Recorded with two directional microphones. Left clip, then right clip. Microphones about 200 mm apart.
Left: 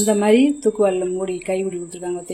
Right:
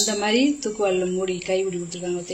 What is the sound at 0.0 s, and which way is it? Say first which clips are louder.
A woman's voice: left 5 dB; 50° left (ahead or behind).